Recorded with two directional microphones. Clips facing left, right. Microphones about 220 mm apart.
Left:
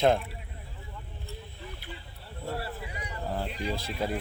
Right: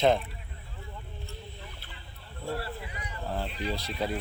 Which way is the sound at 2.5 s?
30° left (ahead or behind).